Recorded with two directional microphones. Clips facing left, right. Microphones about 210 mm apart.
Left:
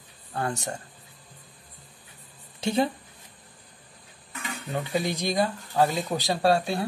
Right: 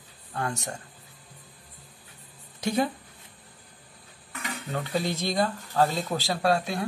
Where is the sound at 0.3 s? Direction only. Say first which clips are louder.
Left 2 dB; 35° left (ahead or behind).